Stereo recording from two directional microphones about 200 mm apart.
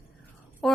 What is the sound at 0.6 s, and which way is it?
Speech, centre (ahead or behind).